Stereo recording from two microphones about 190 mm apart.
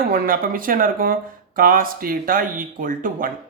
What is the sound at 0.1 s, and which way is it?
Speech, 50° right (ahead or behind).